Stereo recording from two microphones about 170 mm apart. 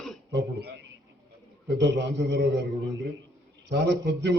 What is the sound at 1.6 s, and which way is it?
Speech, 90° right.